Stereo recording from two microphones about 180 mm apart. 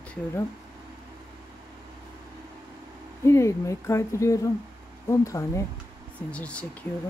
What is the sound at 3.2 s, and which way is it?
Speech, 15° left (ahead or behind).